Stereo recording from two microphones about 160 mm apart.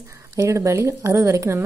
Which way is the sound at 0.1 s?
20° right (ahead or behind).